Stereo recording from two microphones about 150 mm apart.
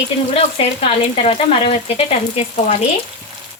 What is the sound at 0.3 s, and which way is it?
Speech, 40° left (ahead or behind).